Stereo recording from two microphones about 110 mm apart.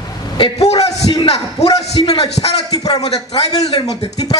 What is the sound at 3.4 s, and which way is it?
Speech, 70° left (ahead or behind).